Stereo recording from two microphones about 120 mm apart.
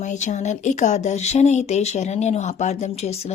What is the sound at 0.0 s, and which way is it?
Speech, 85° left.